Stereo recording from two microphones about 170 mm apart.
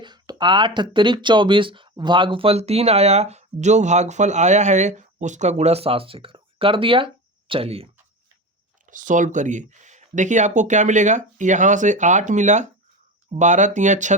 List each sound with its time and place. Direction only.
0.0 s speech: 25° right (ahead or behind)
8.9 s speech: 50° right (ahead or behind)